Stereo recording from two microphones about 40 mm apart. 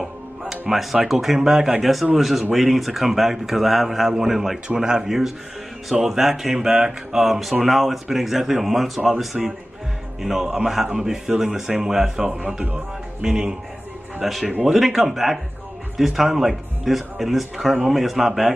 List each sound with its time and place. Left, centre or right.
0.5 s music: centre
1.0 s speech: centre
1.8 s speech: centre
14.2 s speech: centre